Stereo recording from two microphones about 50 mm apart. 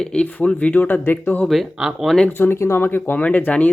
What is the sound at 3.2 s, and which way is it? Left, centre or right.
Speech, left.